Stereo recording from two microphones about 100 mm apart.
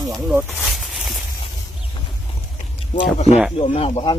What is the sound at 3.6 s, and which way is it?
Speech, 85° left.